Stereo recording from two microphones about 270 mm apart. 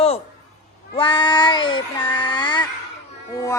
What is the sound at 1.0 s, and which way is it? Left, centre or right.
Child singing, centre.